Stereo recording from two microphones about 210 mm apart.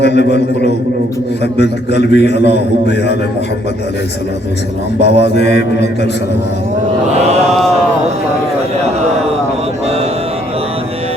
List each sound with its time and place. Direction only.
0.0 s a sound: 55° left (ahead or behind)
2.0 s mantra: 55° left (ahead or behind)
5.0 s mantra: 30° right (ahead or behind)
5.3 s mantra: 55° left (ahead or behind)